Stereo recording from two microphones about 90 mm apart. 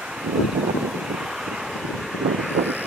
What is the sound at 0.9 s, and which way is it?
Vehicle, 5° right (ahead or behind).